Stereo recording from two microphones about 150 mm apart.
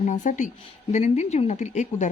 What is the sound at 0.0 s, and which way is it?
A woman's voice, 55° left (ahead or behind).